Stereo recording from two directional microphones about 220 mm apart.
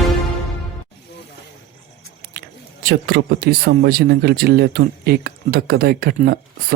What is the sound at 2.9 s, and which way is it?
Speech, 50° right (ahead or behind).